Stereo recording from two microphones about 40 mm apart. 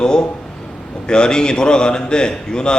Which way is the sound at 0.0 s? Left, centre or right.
Centre.